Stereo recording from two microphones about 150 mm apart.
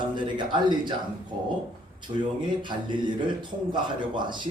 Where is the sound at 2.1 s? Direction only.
30° right (ahead or behind).